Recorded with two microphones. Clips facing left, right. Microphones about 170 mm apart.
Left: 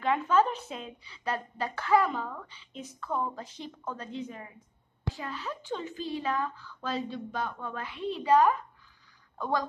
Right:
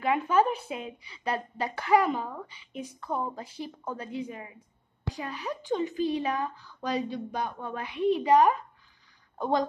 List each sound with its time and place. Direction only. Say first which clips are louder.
0.0 s a woman's voice: right 1 dB; 10° right (ahead or behind)